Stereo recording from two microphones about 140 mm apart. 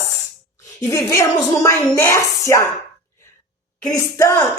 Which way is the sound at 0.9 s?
20° left (ahead or behind).